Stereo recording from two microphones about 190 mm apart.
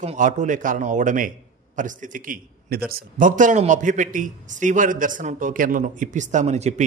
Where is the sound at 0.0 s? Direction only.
40° right (ahead or behind).